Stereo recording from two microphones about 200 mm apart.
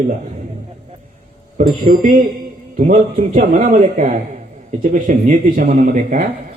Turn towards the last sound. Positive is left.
turn(degrees=-40)  # may be behind; listen again after turning